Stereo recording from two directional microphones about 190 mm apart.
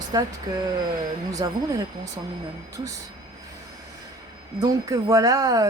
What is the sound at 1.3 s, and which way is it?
Speech, 20° right (ahead or behind).